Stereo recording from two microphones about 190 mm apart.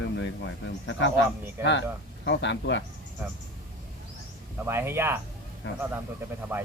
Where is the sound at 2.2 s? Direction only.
70° left (ahead or behind).